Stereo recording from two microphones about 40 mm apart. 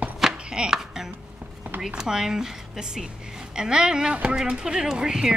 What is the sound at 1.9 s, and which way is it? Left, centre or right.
Speech, centre.